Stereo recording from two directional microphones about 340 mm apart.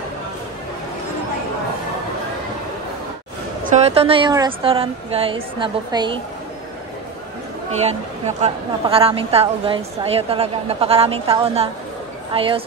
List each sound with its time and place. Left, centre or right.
3.6 s a woman's voice: centre
8.4 s a woman's voice: centre